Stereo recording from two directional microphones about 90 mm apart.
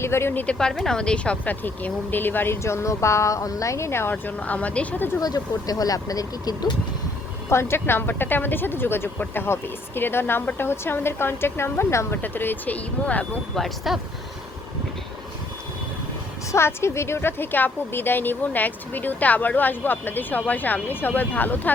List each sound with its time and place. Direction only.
0.0 s speech: 30° left (ahead or behind)
0.4 s a woman's voice: 5° left (ahead or behind); by 4.1 s 30° left (ahead or behind)
4.1 s speech: 15° left (ahead or behind)
5.2 s speech: 45° left (ahead or behind)
7.5 s a woman's voice: 30° left (ahead or behind)
13.6 s speech: centre (ahead or behind)
16.5 s a woman's voice: 30° left (ahead or behind)